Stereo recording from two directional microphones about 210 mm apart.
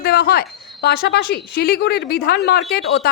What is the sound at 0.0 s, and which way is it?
A woman's voice, 45° left (ahead or behind).